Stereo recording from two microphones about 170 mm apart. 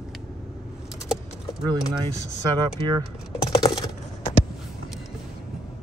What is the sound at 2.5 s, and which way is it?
Speech, 25° right (ahead or behind).